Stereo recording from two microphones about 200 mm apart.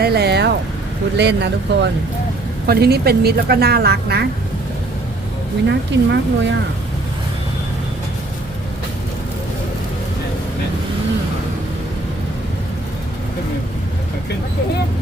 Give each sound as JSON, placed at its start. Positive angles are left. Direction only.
{"t": 0.0, "sound": "vehicle", "side_deg": -55}
{"t": 1.1, "sound": "speech", "side_deg": -60}
{"t": 5.6, "sound": "speech", "side_deg": -60}